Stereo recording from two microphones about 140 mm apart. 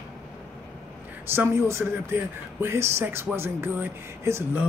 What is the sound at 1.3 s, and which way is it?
Speech, 20° right (ahead or behind).